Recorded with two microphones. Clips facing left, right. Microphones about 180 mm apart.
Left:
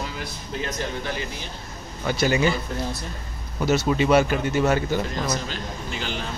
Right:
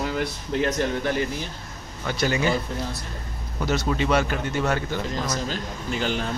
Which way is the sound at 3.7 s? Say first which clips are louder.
Left 4 dB; 10° left (ahead or behind).